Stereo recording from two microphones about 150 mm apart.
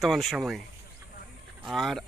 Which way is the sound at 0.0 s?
Centre (ahead or behind).